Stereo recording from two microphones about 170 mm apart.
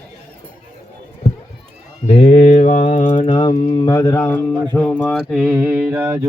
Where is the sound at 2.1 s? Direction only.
35° left (ahead or behind).